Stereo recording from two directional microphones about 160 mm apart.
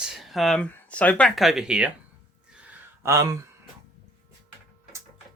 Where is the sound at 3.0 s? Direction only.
20° right (ahead or behind).